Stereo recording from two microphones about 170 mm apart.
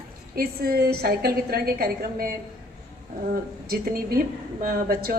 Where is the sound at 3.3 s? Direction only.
60° right (ahead or behind).